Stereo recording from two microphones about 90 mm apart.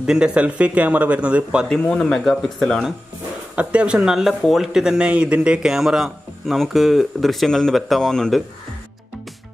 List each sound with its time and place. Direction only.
0.0 s speech: 10° right (ahead or behind)
1.7 s a man's voice: 5° left (ahead or behind)
3.5 s a man's voice: 10° right (ahead or behind); by 8.4 s 5° left (ahead or behind)